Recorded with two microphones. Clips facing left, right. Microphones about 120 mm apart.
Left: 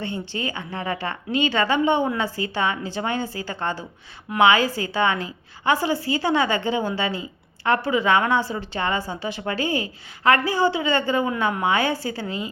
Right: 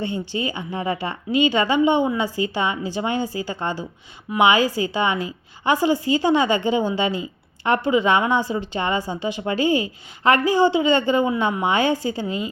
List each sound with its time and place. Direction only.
0.0 s a woman's voice: 15° right (ahead or behind)